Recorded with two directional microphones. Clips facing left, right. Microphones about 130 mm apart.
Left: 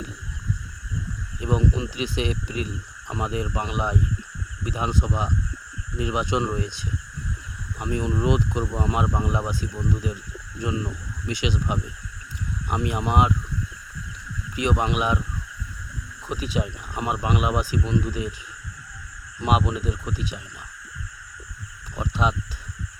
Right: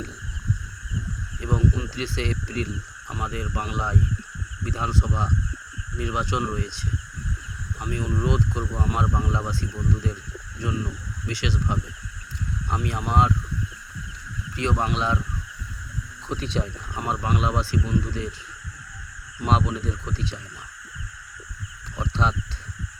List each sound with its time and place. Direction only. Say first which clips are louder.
1.4 s speech: left 1 dB; 20° left (ahead or behind)
14.5 s speech: left 2 dB; 15° left (ahead or behind)
16.3 s speech: left 1 dB; 10° left (ahead or behind)
19.4 s speech: left 1 dB; 15° left (ahead or behind)
21.9 s speech: left 1 dB; 10° left (ahead or behind)